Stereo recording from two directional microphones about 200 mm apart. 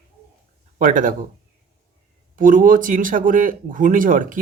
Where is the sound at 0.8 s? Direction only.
40° right (ahead or behind).